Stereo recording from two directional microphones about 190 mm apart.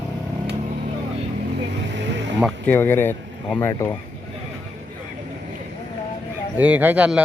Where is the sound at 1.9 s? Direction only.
70° right (ahead or behind).